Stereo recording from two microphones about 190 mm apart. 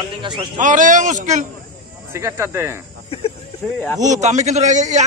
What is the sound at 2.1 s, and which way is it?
Speech, 15° right (ahead or behind).